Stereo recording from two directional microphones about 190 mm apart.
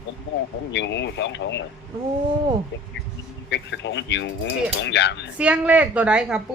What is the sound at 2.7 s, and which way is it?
Speech, 75° left (ahead or behind).